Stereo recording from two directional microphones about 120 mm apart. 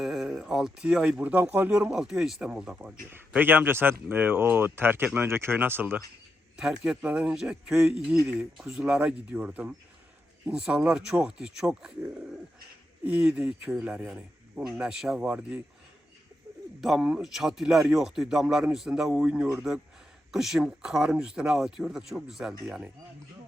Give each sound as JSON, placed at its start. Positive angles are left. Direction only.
{"t": 0.0, "sound": "speech", "side_deg": 0}
{"t": 3.1, "sound": "speech", "side_deg": -15}
{"t": 13.1, "sound": "speech", "side_deg": -10}
{"t": 16.8, "sound": "speech", "side_deg": -5}